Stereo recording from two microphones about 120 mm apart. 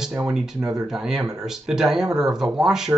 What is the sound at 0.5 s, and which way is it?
Speech, 30° right (ahead or behind).